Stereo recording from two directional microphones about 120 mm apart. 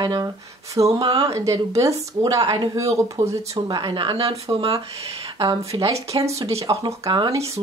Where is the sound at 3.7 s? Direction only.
40° right (ahead or behind).